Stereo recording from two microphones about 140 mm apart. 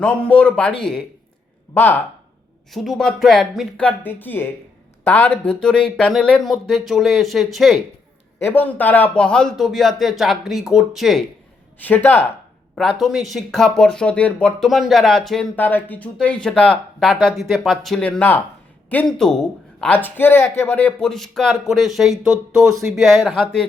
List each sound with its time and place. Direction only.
0.0 s speech: 10° left (ahead or behind)
1.7 s speech: 15° left (ahead or behind)
2.7 s a man's voice: centre (ahead or behind)
3.8 s a man's voice: 15° left (ahead or behind)
8.4 s a man's voice: 15° left (ahead or behind); by 11.3 s centre (ahead or behind)
11.8 s speech: 10° left (ahead or behind)
13.0 s a man's voice: centre (ahead or behind)